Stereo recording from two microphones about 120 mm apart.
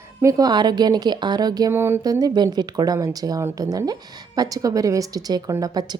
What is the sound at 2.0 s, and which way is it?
A woman's voice, 30° right (ahead or behind).